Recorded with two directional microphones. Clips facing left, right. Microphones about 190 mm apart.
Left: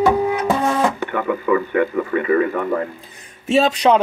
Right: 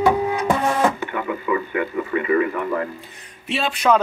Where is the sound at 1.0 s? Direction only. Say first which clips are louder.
Left 4 dB; 50° left (ahead or behind).